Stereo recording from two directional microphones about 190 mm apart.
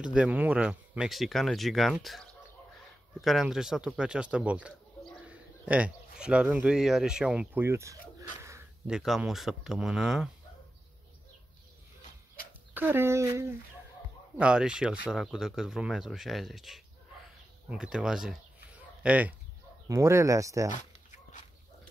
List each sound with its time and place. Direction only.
0.0 s speech: 5° right (ahead or behind)
12.7 s speech: 10° right (ahead or behind)
20.7 s dog: 40° left (ahead or behind)